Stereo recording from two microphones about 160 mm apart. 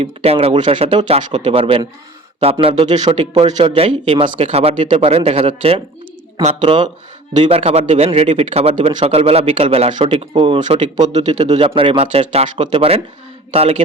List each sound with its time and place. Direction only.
0.0 s speech: 35° right (ahead or behind)
4.4 s speech: 45° right (ahead or behind); by 6.9 s 30° right (ahead or behind)
7.4 s speech: 40° right (ahead or behind)